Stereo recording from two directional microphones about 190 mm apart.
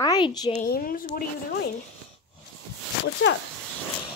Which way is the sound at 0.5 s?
50° left (ahead or behind).